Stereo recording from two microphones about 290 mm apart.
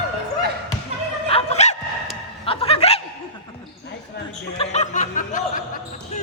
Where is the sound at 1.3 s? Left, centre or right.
Left.